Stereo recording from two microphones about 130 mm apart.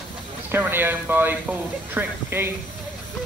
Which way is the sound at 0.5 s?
15° right (ahead or behind).